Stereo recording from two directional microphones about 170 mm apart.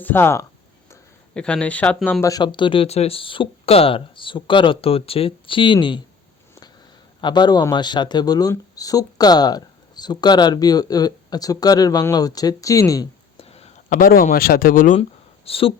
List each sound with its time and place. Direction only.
0.0 s speech: 10° left (ahead or behind)
2.2 s speech: 25° left (ahead or behind)
7.2 s speech: 25° left (ahead or behind)
13.3 s a man's voice: 35° left (ahead or behind); by 14.9 s 55° left (ahead or behind)
15.4 s speech: 35° left (ahead or behind)